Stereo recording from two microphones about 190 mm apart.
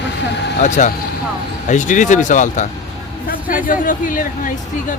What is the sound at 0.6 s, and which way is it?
Speech, 40° left (ahead or behind).